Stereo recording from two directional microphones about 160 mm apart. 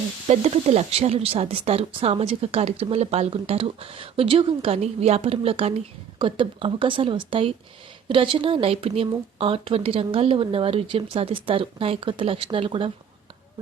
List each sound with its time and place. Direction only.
0.3 s speech: 40° right (ahead or behind)